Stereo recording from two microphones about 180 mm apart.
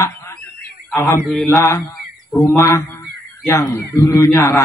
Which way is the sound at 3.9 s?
15° left (ahead or behind).